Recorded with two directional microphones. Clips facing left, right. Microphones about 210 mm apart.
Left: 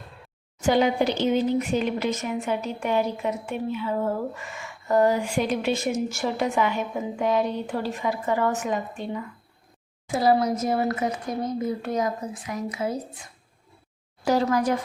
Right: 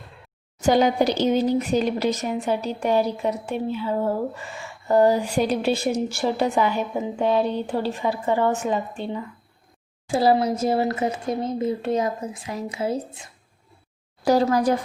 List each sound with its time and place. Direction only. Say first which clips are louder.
0.6 s speech: right 2 dB; 40° right (ahead or behind)
14.3 s speech: right 3 dB; 35° right (ahead or behind)